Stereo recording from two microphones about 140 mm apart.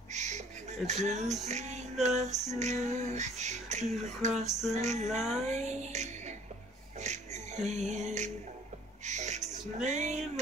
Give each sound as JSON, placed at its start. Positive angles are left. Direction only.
{"t": 0.1, "sound": "a sound", "side_deg": -55}
{"t": 0.8, "sound": "female singing", "side_deg": -55}
{"t": 5.5, "sound": "music", "side_deg": -55}